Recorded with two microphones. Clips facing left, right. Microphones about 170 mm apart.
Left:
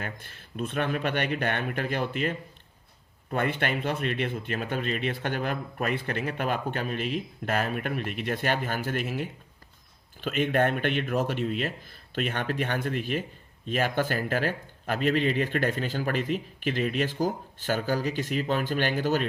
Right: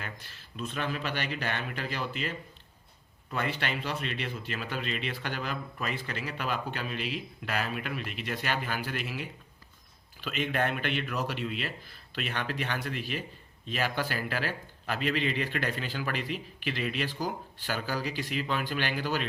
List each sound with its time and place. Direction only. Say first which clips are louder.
0.0 s speech: left 5 dB; 50° left (ahead or behind)